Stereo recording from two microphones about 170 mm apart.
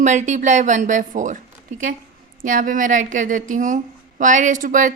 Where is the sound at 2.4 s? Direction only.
50° right (ahead or behind).